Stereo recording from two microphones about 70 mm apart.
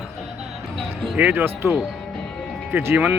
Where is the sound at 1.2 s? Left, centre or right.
Right.